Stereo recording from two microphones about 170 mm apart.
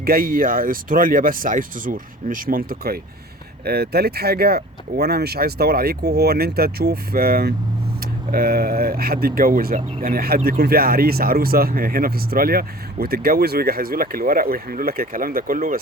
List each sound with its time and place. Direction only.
0.0 s speech: 60° right (ahead or behind)